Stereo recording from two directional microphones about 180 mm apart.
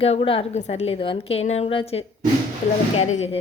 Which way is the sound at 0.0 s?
30° left (ahead or behind).